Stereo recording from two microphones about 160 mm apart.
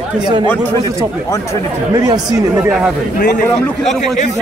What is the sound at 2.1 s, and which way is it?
Speech, 25° right (ahead or behind).